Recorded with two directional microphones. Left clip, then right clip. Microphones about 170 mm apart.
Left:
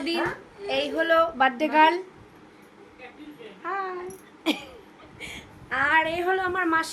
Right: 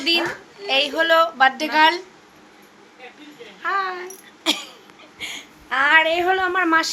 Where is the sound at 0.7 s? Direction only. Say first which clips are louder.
Right 6 dB; 20° left (ahead or behind).